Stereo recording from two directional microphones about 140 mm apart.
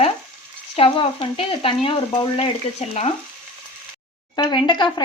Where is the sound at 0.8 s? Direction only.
40° left (ahead or behind).